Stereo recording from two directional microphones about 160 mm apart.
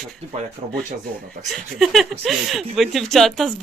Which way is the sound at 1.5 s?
Centre (ahead or behind).